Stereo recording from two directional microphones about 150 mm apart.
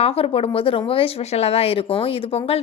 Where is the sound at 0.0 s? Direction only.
40° left (ahead or behind).